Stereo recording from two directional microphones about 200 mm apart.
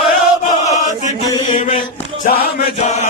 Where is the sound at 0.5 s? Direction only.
35° left (ahead or behind).